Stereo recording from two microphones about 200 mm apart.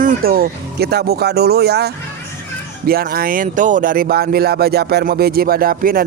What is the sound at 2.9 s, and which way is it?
Speech, 50° right (ahead or behind).